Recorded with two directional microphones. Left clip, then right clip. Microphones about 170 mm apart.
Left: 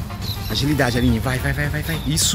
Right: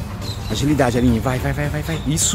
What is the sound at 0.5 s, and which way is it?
Speech, 5° right (ahead or behind).